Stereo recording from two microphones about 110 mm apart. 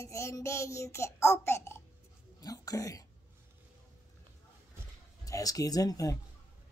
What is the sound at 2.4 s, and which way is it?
Speech, 35° left (ahead or behind).